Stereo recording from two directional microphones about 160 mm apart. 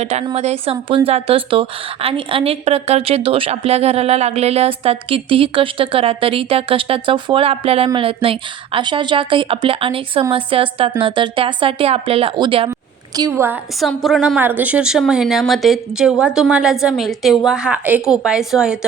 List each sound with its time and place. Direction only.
0.0 s a woman's voice: 40° right (ahead or behind)
13.1 s a woman's voice: 20° right (ahead or behind)
13.7 s speech: centre (ahead or behind)
14.3 s speech: 10° right (ahead or behind)